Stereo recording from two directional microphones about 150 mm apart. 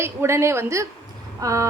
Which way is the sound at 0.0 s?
15° right (ahead or behind).